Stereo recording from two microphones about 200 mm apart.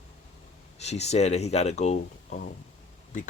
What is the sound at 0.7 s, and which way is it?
Speech, 30° left (ahead or behind).